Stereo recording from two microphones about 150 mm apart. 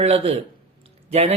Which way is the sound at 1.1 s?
45° right (ahead or behind).